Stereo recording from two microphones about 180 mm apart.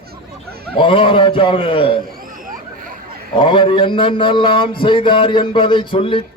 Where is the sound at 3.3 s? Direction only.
25° left (ahead or behind).